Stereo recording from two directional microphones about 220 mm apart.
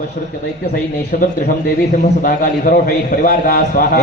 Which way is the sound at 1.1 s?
40° left (ahead or behind).